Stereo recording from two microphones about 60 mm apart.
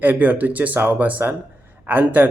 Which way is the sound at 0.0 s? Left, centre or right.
Right.